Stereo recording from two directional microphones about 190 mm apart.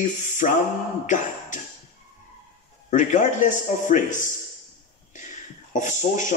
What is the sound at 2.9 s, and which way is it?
A man's voice, 40° left (ahead or behind).